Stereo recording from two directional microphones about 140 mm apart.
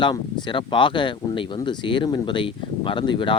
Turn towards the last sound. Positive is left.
turn(degrees=35)  # may be behind; listen again after turning